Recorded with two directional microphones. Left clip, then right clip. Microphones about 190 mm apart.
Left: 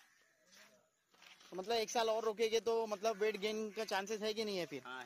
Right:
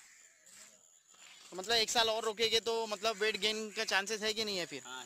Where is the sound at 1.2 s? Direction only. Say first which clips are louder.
Right 3 dB; 25° right (ahead or behind).